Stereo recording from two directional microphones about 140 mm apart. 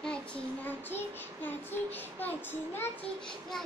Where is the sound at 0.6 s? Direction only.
15° left (ahead or behind).